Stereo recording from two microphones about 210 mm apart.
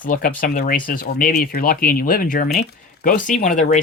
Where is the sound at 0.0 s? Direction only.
40° left (ahead or behind).